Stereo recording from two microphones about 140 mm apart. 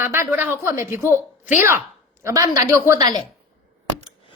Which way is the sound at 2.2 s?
25° right (ahead or behind).